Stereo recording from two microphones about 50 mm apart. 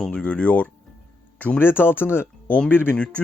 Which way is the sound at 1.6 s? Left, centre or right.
Left.